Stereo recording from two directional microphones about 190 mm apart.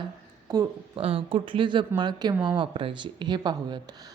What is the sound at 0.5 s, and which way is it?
Speech, 25° right (ahead or behind).